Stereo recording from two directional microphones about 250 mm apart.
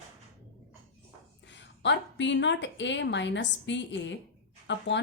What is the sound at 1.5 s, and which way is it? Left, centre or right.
Speech, left.